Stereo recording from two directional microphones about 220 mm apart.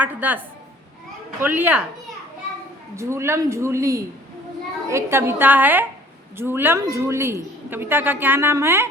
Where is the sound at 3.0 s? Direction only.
10° right (ahead or behind).